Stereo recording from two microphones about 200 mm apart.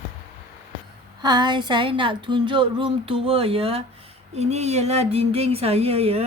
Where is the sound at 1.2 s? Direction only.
20° right (ahead or behind).